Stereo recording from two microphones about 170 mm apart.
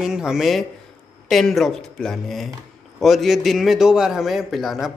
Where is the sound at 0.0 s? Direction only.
5° right (ahead or behind).